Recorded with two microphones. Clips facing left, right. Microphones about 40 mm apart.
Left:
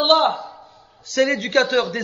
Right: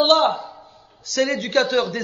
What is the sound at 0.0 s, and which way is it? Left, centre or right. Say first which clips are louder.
A man's voice: even; left.